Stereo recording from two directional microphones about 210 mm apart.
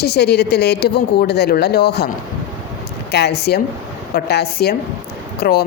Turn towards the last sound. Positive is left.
turn(degrees=50)  # may be behind; listen again after turning